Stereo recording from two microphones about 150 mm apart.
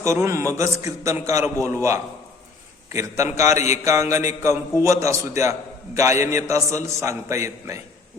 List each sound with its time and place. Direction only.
0.0 s a man's voice: 20° right (ahead or behind)